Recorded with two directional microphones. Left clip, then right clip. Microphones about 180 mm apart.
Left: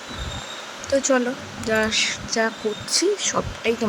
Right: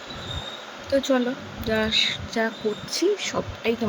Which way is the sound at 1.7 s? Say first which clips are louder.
Left 1 dB; 10° right (ahead or behind).